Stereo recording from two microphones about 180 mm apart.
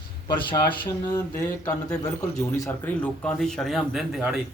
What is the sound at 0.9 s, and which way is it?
Speech, 15° left (ahead or behind).